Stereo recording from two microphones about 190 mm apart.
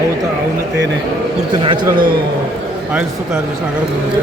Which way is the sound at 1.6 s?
25° right (ahead or behind).